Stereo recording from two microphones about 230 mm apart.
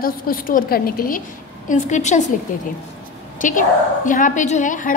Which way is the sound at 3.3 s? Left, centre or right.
Left.